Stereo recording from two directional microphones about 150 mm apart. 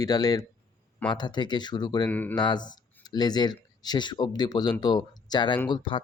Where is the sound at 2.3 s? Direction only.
30° left (ahead or behind).